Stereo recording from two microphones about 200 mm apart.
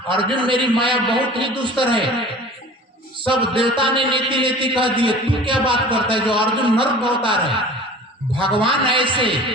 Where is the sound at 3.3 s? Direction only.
25° right (ahead or behind).